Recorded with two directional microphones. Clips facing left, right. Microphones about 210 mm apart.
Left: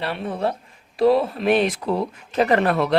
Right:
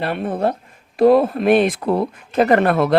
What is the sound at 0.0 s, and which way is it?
Speech, 50° right (ahead or behind).